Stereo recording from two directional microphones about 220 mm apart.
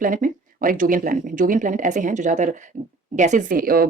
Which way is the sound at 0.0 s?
40° right (ahead or behind).